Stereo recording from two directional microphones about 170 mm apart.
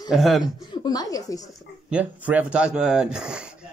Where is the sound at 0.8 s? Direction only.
20° left (ahead or behind).